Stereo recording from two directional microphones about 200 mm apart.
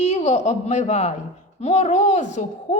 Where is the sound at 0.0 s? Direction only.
35° left (ahead or behind).